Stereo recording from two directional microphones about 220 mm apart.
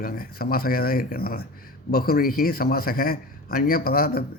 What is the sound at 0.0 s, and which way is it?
A man's voice, 40° left (ahead or behind).